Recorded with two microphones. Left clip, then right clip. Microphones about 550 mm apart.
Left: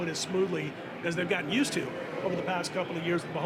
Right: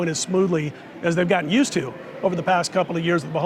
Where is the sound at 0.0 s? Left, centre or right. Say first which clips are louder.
Right 8 dB; right.